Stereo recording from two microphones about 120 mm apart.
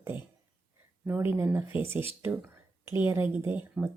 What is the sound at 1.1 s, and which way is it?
Speech, 20° right (ahead or behind).